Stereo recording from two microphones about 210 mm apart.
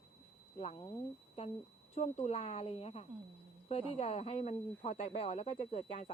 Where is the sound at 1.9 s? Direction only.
30° left (ahead or behind).